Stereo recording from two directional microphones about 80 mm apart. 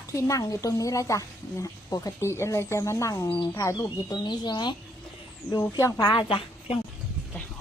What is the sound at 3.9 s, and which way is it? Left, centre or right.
Speech, left.